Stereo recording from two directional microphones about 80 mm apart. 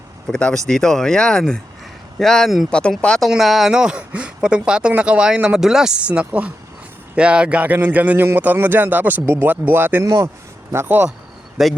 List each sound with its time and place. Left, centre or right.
0.3 s speech: centre; by 10.0 s right
10.0 s speech: right
10.7 s speech: right
11.6 s speech: centre